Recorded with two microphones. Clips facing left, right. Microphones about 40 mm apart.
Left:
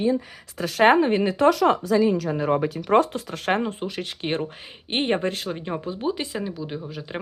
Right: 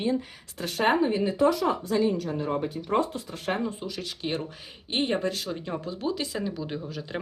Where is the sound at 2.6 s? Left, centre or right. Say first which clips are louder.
Left 7 dB; left.